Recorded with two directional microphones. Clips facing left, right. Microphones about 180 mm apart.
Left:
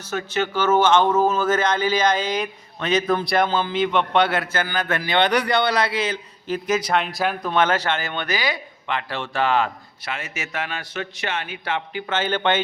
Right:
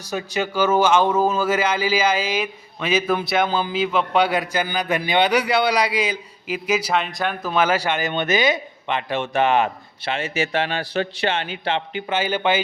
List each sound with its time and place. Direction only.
0.0 s a man's voice: 15° right (ahead or behind)
12.0 s a man's voice: 10° right (ahead or behind)